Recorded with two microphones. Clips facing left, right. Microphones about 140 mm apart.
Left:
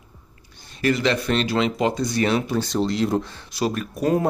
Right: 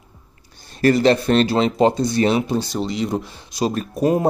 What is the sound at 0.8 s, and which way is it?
Speech, 35° right (ahead or behind).